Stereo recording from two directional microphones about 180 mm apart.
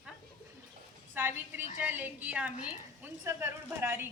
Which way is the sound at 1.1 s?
10° right (ahead or behind).